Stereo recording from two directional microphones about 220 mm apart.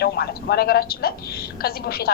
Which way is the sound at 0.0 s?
45° left (ahead or behind).